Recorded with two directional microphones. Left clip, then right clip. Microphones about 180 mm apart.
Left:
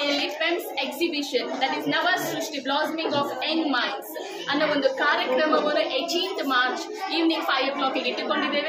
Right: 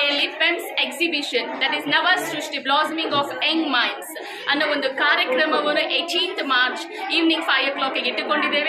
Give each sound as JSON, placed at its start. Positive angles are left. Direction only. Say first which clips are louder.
{"t": 0.0, "sound": "a woman's voice", "louder": "right 5 dB", "side_deg": 0}